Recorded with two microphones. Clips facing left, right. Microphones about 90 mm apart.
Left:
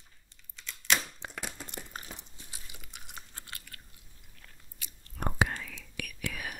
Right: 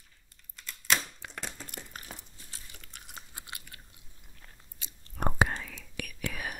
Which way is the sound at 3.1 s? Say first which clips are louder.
Right 2 dB; 15° right (ahead or behind).